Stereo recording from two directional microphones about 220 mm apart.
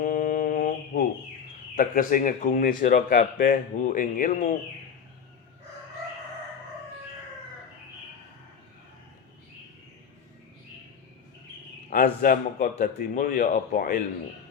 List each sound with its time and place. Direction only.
0.0 s mantra: 40° left (ahead or behind)
1.7 s speech: 40° left (ahead or behind)
11.9 s speech: 40° left (ahead or behind)